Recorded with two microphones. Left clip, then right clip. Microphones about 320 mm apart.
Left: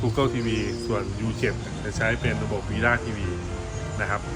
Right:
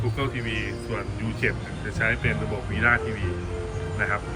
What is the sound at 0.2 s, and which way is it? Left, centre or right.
Speech, centre.